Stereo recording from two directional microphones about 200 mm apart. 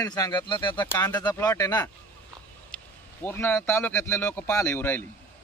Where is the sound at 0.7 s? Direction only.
10° left (ahead or behind).